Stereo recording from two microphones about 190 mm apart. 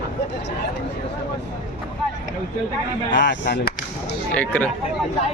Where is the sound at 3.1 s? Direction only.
70° left (ahead or behind).